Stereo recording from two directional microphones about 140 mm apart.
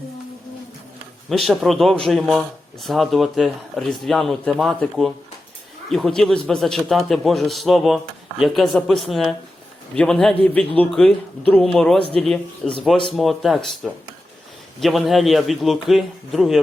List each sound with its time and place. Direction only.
1.3 s a man's voice: centre (ahead or behind)